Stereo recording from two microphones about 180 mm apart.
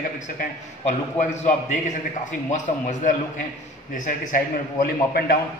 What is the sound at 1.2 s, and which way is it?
A man's voice, 45° left (ahead or behind).